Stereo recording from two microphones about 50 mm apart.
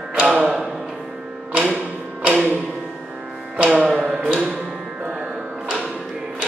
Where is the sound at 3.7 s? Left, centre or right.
Centre.